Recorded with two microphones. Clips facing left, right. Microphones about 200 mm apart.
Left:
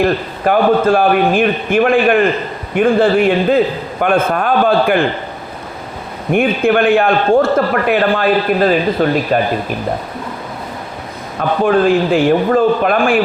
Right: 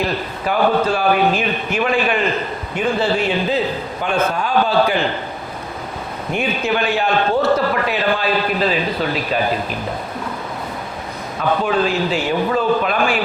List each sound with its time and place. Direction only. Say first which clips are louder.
0.0 s a man's voice: left 7 dB; 50° left (ahead or behind)
6.3 s a man's voice: left 8 dB; 55° left (ahead or behind)
11.3 s a man's voice: left 5 dB; 50° left (ahead or behind)